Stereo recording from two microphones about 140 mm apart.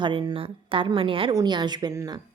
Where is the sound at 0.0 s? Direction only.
35° right (ahead or behind).